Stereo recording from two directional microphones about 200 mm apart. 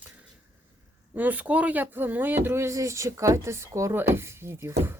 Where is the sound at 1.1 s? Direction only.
10° right (ahead or behind).